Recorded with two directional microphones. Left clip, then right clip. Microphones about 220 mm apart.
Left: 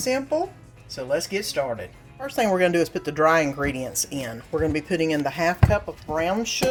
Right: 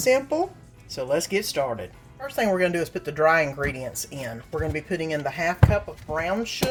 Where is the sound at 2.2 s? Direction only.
20° left (ahead or behind).